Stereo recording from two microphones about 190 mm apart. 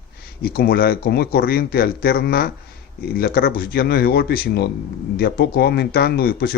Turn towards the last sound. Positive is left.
turn(degrees=55)  # may be behind; listen again after turning